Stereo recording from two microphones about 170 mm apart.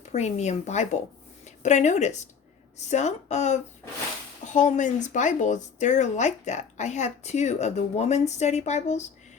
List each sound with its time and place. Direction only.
0.1 s speech: 40° left (ahead or behind)